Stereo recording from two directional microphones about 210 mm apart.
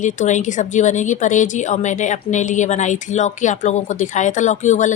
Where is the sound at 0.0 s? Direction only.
35° left (ahead or behind).